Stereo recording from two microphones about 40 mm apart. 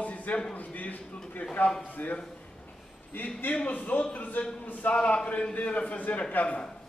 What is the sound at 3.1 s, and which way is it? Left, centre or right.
Speech, left.